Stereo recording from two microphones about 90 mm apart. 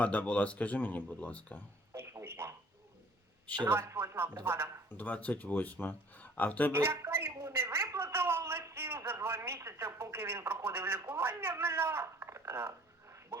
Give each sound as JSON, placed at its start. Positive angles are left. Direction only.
{"t": 0.0, "sound": "speech", "side_deg": 15}
{"t": 1.9, "sound": "music", "side_deg": -30}
{"t": 3.7, "sound": "a man's voice", "side_deg": -30}
{"t": 4.9, "sound": "speech", "side_deg": 20}
{"t": 6.7, "sound": "speech", "side_deg": -30}